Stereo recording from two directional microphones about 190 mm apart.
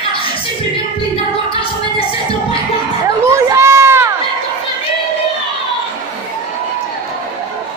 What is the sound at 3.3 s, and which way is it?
Run, 15° right (ahead or behind).